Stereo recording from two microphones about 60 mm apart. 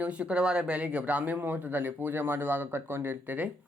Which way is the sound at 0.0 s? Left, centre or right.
Centre.